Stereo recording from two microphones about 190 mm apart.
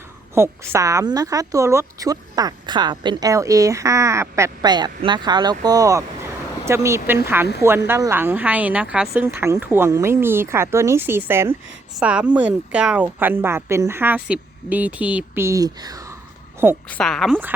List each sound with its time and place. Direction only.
0.3 s a woman's voice: 15° right (ahead or behind)
16.9 s a woman's voice: centre (ahead or behind)